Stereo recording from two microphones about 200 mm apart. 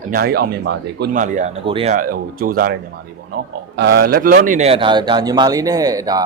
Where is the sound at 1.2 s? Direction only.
40° right (ahead or behind).